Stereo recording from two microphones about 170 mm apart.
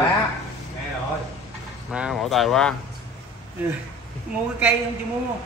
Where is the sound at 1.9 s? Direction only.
5° right (ahead or behind).